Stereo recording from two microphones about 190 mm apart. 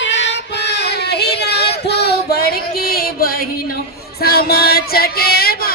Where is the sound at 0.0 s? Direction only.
70° left (ahead or behind).